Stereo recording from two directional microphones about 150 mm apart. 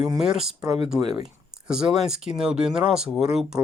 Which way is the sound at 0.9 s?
30° right (ahead or behind).